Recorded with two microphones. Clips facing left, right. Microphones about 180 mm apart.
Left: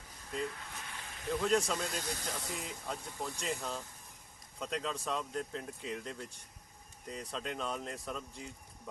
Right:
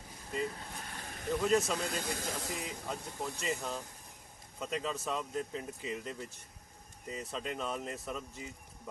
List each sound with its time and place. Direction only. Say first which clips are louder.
0.5 s a sound: right 2 dB; 35° right (ahead or behind)
1.4 s speech: right 1 dB; 5° right (ahead or behind)
1.8 s speech: right 2 dB; 55° right (ahead or behind)
2.6 s speech: right 2 dB; centre (ahead or behind)